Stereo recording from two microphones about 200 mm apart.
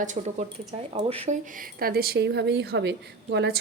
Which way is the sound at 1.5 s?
45° right (ahead or behind).